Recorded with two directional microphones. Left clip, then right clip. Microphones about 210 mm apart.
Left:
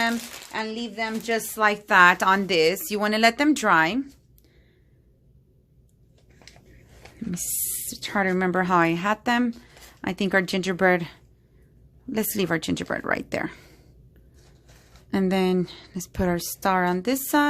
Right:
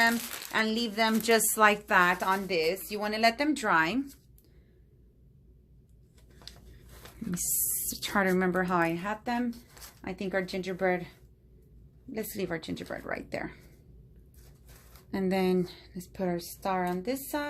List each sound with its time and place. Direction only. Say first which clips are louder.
0.5 s a woman's voice: right 1 dB; 5° right (ahead or behind)
1.9 s speech: left 8 dB; 25° left (ahead or behind)
2.1 s a woman's voice: left 8 dB; 45° left (ahead or behind); by 4.0 s 25° left (ahead or behind)
7.9 s a woman's voice: left 3 dB; 10° left (ahead or behind)
8.4 s a woman's voice: left 7 dB; 25° left (ahead or behind); by 11.1 s 50° left (ahead or behind)
12.1 s speech: left 9 dB; 45° left (ahead or behind)
15.1 s a woman's voice: left 5 dB; 30° left (ahead or behind); by 17.5 s 45° left (ahead or behind)